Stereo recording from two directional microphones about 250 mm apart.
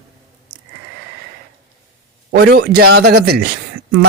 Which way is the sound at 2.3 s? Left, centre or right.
Right.